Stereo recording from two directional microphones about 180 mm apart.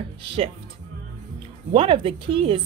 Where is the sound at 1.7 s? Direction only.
30° right (ahead or behind).